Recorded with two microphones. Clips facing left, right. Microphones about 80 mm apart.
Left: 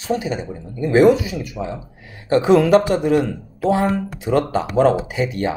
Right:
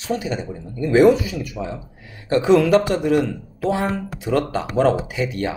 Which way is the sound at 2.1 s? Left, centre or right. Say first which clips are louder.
Left 2 dB; left.